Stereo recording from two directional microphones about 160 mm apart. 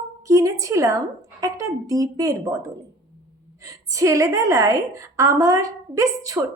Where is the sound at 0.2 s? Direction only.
20° right (ahead or behind).